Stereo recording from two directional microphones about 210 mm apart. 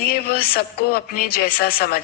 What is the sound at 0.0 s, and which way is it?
A woman's voice, 45° left (ahead or behind).